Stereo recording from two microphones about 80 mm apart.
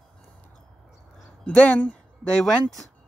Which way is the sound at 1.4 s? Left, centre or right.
Centre.